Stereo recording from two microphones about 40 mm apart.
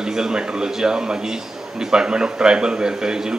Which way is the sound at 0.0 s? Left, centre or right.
Centre.